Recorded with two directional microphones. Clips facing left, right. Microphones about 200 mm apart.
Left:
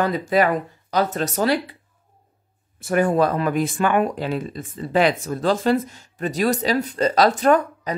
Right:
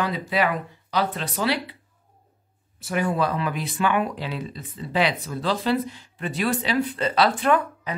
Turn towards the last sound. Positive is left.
turn(degrees=40)  # may be behind; listen again after turning